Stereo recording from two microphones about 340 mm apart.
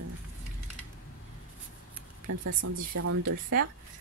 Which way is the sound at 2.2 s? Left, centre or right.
Right.